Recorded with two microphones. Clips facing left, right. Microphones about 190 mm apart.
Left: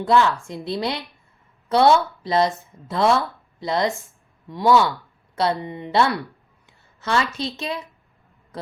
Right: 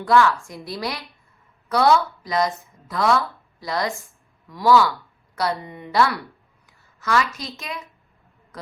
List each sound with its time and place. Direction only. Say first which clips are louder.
0.0 s a woman's voice: even; 20° left (ahead or behind)